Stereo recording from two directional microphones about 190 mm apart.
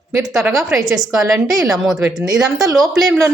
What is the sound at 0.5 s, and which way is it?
A woman's voice, centre (ahead or behind).